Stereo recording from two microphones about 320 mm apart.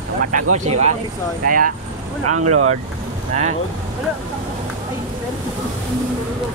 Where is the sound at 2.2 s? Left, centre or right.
Right.